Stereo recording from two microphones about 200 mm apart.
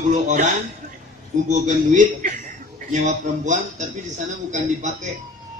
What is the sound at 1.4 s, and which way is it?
A man's voice, 40° right (ahead or behind).